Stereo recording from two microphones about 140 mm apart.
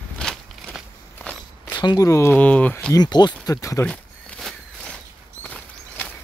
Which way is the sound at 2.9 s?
30° left (ahead or behind).